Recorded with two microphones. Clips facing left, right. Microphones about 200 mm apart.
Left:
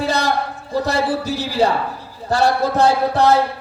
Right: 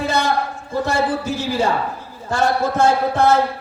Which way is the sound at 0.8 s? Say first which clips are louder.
Even; 35° left (ahead or behind).